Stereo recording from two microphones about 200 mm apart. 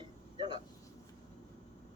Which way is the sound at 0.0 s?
25° right (ahead or behind).